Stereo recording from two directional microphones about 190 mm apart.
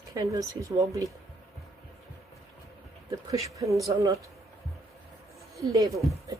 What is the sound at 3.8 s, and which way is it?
Speech, 15° right (ahead or behind).